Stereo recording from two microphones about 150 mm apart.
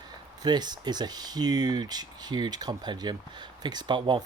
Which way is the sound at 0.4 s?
30° right (ahead or behind).